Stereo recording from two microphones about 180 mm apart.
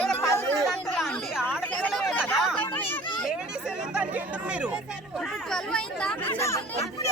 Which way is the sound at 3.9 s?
5° right (ahead or behind).